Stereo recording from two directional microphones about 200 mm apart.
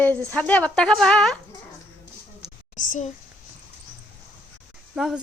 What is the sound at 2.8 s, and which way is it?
Speech, 40° left (ahead or behind).